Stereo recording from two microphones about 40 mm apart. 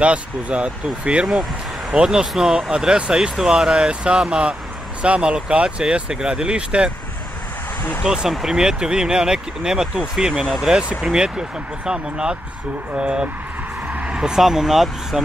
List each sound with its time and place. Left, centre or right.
0.0 s speech: right
1.2 s speech: centre
1.9 s speech: centre
8.0 s speech: right
8.3 s speech: centre
8.5 s speech: centre
10.4 s speech: centre
10.7 s speech: right; by 15.2 s centre